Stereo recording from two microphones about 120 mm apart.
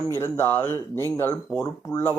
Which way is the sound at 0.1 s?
20° left (ahead or behind).